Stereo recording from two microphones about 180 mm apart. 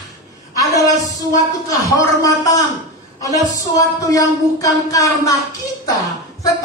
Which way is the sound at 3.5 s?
20° left (ahead or behind).